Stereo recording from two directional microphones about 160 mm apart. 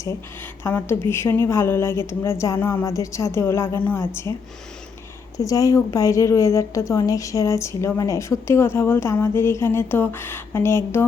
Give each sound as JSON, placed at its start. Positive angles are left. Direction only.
{"t": 0.6, "sound": "a woman's voice", "side_deg": 15}
{"t": 5.4, "sound": "a woman's voice", "side_deg": 20}